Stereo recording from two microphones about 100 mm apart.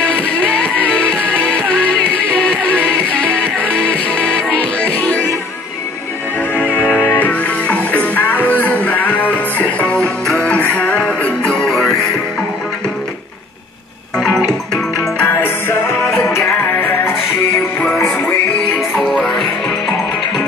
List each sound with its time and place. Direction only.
0.0 s music: 15° left (ahead or behind)
6.5 s music: 15° left (ahead or behind)
11.5 s music: centre (ahead or behind)
14.1 s music: 5° left (ahead or behind); by 17.1 s 20° left (ahead or behind)
18.8 s music: centre (ahead or behind)